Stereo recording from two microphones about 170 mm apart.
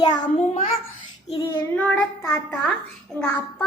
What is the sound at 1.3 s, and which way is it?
Child singing, 25° left (ahead or behind).